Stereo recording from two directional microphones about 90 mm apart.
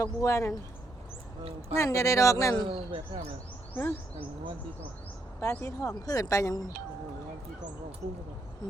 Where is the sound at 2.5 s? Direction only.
75° right (ahead or behind).